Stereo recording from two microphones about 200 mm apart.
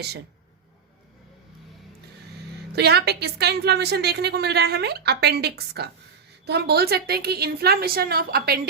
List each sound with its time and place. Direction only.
2.7 s a woman's voice: 55° right (ahead or behind)